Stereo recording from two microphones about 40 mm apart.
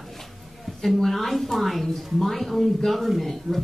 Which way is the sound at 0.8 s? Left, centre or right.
Centre.